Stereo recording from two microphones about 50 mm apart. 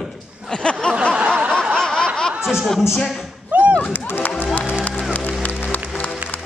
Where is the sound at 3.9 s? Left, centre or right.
Left.